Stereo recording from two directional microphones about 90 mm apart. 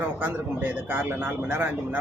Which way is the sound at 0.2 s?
20° right (ahead or behind).